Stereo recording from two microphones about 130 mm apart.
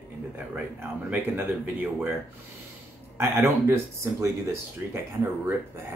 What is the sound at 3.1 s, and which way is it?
Speech, 20° right (ahead or behind).